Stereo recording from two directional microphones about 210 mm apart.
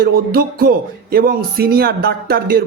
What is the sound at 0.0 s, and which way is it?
Speech, 45° right (ahead or behind).